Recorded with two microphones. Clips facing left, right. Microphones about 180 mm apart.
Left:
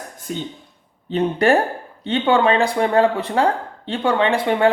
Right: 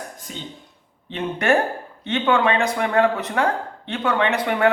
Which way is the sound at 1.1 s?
35° left (ahead or behind).